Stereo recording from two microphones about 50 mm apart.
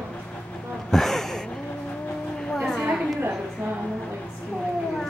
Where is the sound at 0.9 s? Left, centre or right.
Centre.